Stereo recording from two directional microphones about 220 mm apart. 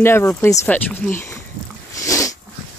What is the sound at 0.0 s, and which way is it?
Speech, 10° left (ahead or behind).